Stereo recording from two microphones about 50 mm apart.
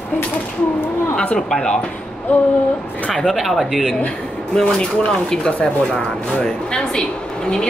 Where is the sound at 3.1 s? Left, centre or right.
Centre.